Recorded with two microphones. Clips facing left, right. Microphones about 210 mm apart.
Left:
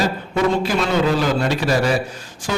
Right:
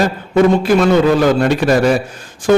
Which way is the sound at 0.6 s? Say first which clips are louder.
Right 7 dB; 55° right (ahead or behind).